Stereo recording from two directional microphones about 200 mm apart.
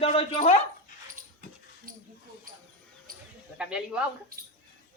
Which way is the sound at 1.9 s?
45° right (ahead or behind).